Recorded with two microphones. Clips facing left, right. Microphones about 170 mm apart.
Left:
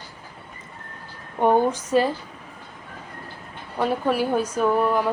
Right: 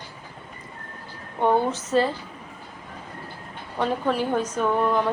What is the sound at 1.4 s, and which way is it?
Speech, 15° left (ahead or behind).